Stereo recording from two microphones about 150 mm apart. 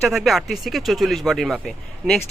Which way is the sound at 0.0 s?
Centre (ahead or behind).